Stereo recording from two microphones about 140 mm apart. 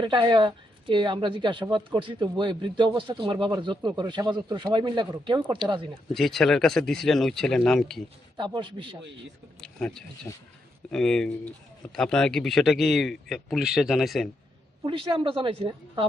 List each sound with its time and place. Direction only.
0.0 s speech: 35° right (ahead or behind)
6.1 s speech: centre (ahead or behind)
8.4 s speech: 35° right (ahead or behind)
9.6 s speech: 5° left (ahead or behind)
14.8 s speech: 35° right (ahead or behind)